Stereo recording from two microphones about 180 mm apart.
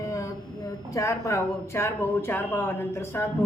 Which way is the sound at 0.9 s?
15° left (ahead or behind).